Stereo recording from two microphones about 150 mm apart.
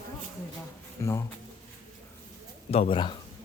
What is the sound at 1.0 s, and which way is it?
Speech, 20° left (ahead or behind).